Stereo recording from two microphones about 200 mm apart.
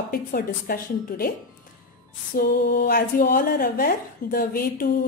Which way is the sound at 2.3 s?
55° left (ahead or behind).